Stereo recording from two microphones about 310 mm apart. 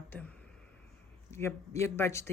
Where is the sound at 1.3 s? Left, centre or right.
Centre.